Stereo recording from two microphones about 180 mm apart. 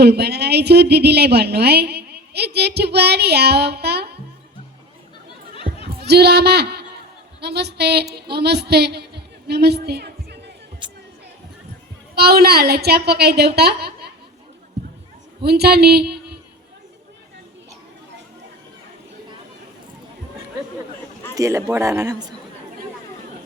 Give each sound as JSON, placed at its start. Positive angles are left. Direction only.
{"t": 0.0, "sound": "a woman's voice", "side_deg": -65}
{"t": 5.9, "sound": "a woman's voice", "side_deg": -65}
{"t": 8.1, "sound": "a sound", "side_deg": -65}
{"t": 12.1, "sound": "a woman's voice", "side_deg": -60}
{"t": 14.8, "sound": "a sound", "side_deg": -65}
{"t": 15.4, "sound": "a woman's voice", "side_deg": -65}
{"t": 21.3, "sound": "a man's voice", "side_deg": -15}